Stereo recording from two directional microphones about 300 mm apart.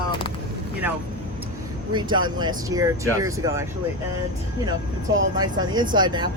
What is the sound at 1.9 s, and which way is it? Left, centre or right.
Speech, centre.